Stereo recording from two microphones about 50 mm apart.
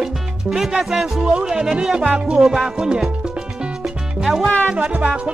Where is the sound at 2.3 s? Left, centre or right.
Centre.